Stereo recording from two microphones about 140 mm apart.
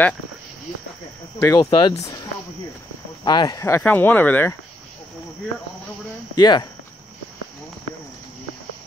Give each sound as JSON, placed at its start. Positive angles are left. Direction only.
{"t": 1.4, "sound": "speech", "side_deg": 20}
{"t": 3.3, "sound": "speech", "side_deg": 30}
{"t": 6.3, "sound": "speech", "side_deg": 30}